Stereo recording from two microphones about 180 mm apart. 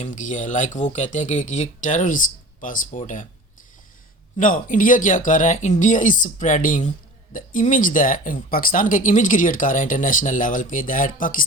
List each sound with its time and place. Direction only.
0.0 s speech: 45° left (ahead or behind)
4.4 s speech: 45° left (ahead or behind)